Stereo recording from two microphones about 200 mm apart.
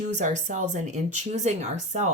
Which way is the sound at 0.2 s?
40° right (ahead or behind).